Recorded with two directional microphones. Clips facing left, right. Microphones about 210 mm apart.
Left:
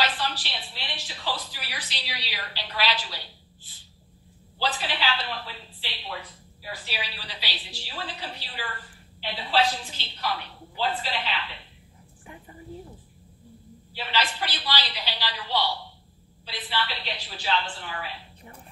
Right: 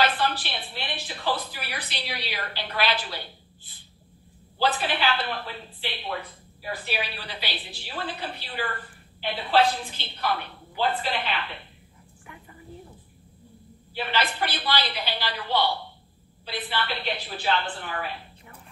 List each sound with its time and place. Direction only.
0.0 s a woman's voice: 55° right (ahead or behind)
13.9 s a woman's voice: 55° right (ahead or behind)